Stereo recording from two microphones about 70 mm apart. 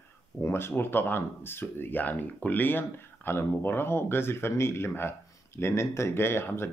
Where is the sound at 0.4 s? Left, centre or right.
Left.